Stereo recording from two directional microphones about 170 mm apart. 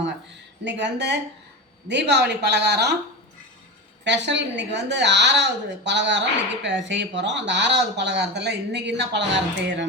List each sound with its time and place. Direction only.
0.6 s a woman's voice: 90° right
4.0 s a woman's voice: 90° right